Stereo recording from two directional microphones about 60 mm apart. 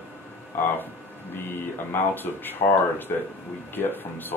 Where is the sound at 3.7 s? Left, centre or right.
Left.